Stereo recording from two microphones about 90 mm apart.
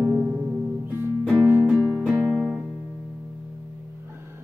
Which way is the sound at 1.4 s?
30° right (ahead or behind).